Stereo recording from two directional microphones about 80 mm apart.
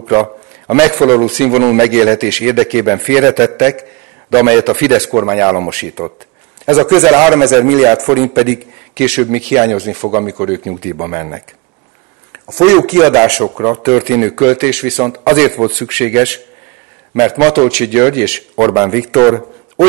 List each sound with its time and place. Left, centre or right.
0.0 s a man's voice: centre